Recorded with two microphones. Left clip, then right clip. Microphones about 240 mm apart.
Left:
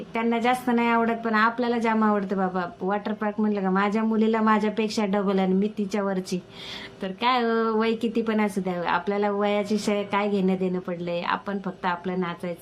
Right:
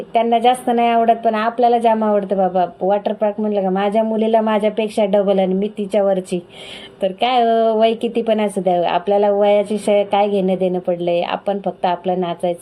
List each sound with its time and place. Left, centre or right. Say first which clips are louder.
0.1 s speech: right 10 dB; centre
10.3 s a woman's voice: right 9 dB; left
11.2 s speech: right 8 dB; centre